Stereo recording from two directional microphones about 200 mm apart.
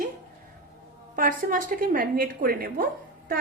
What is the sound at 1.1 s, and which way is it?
Speech, 40° right (ahead or behind).